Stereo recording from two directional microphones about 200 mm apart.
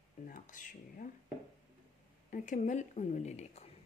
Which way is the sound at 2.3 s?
40° left (ahead or behind).